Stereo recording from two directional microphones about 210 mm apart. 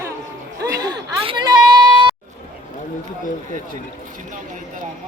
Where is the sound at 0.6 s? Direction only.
20° right (ahead or behind).